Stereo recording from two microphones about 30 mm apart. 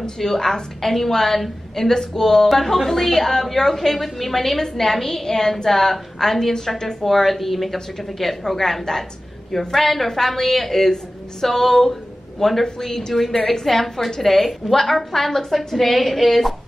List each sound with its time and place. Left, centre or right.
0.2 s a woman's voice: centre
13.1 s a woman's voice: centre